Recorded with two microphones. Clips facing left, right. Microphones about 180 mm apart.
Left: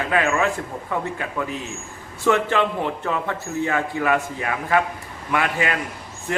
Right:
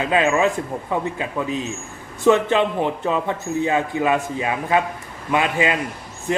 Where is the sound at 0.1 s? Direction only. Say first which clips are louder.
Right 3 dB; 20° right (ahead or behind).